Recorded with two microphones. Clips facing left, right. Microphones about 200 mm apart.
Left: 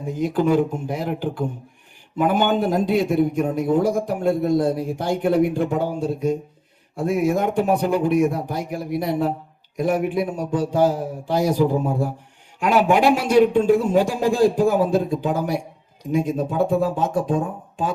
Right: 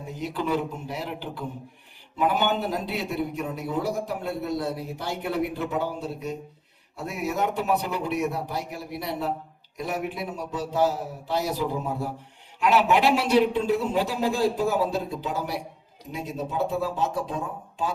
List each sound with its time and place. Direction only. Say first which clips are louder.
0.0 s a man's voice: left 9 dB; 50° left (ahead or behind)